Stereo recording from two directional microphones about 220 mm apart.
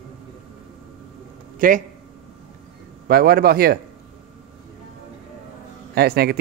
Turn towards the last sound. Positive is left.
turn(degrees=-45)  # may be behind; listen again after turning